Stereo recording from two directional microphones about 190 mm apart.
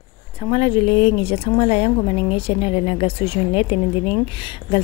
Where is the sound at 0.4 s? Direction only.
30° left (ahead or behind).